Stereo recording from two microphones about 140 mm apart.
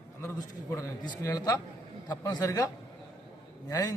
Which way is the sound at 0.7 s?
20° left (ahead or behind).